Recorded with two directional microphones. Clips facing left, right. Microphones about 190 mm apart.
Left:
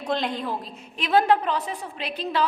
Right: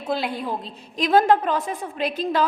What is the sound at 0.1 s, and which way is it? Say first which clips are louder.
Speech: right 1 dB; 10° right (ahead or behind).